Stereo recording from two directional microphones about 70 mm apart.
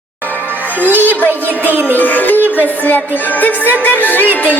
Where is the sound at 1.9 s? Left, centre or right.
Left.